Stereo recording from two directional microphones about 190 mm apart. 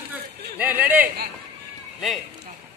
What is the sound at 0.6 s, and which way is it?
Speech, 10° right (ahead or behind).